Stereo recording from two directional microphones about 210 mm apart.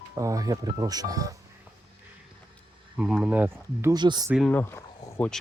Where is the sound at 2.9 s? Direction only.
5° right (ahead or behind); by 4.3 s 20° right (ahead or behind).